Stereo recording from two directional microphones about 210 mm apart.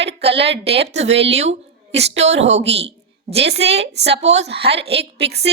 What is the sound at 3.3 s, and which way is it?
A woman's voice, 55° right (ahead or behind).